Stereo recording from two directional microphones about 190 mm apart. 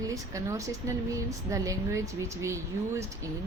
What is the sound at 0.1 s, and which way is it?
A woman's voice, 15° right (ahead or behind).